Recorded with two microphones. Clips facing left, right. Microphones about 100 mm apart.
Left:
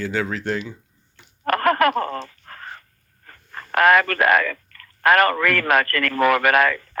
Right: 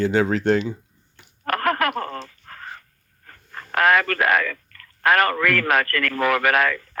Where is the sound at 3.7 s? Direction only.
45° left (ahead or behind).